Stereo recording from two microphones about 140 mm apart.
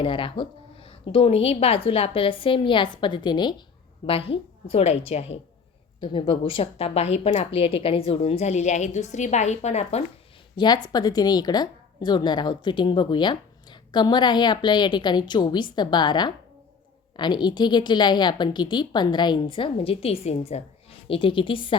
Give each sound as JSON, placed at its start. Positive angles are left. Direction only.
{"t": 0.0, "sound": "a woman's voice", "side_deg": 35}
{"t": 6.0, "sound": "a woman's voice", "side_deg": 35}
{"t": 10.6, "sound": "a woman's voice", "side_deg": 30}